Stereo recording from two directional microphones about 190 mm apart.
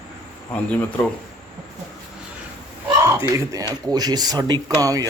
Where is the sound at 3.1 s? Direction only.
15° right (ahead or behind).